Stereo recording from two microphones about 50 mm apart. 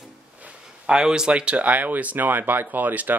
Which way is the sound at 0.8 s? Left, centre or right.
Centre.